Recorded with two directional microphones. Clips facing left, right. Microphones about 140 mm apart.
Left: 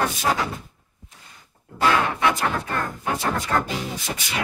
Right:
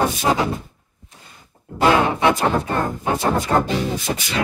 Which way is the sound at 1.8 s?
20° right (ahead or behind).